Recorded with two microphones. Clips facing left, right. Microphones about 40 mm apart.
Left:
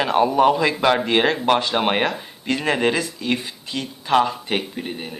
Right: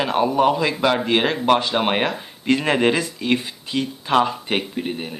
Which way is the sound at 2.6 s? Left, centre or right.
Centre.